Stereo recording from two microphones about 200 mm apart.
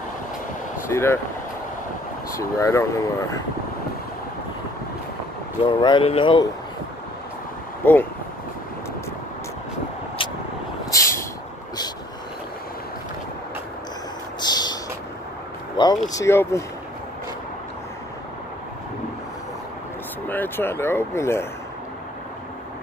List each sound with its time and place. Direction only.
0.8 s speech: 10° left (ahead or behind)
2.3 s speech: 15° left (ahead or behind)
5.7 s speech: 25° left (ahead or behind)
7.8 s speech: 10° left (ahead or behind)
10.9 s vehicle: 15° left (ahead or behind)
14.4 s a sound: 20° left (ahead or behind)
15.8 s speech: 25° left (ahead or behind)
20.2 s speech: 10° left (ahead or behind)